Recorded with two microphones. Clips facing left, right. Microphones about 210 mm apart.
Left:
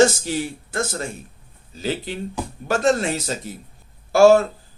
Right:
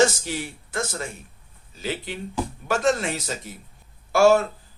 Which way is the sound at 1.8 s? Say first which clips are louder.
Left 4 dB; 35° left (ahead or behind).